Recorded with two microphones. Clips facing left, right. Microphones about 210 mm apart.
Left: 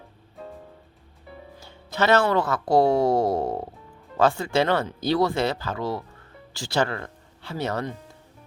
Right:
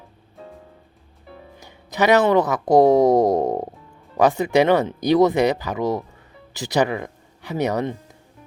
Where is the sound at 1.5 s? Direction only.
15° right (ahead or behind).